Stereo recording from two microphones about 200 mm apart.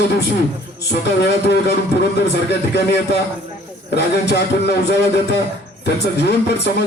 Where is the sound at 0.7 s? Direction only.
55° left (ahead or behind).